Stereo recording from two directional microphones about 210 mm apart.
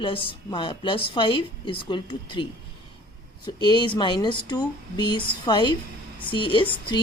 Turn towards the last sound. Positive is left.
turn(degrees=25)  # may be behind; listen again after turning